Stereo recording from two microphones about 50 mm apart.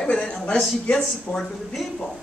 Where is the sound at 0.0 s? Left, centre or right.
Centre.